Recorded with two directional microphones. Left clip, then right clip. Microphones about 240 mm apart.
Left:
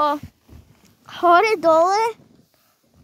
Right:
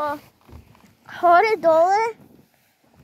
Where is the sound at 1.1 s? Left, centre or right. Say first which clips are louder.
Left 1 dB; left.